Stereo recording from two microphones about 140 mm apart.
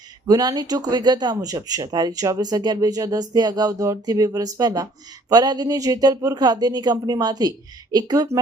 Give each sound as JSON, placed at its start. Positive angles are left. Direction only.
{"t": 0.3, "sound": "speech", "side_deg": -30}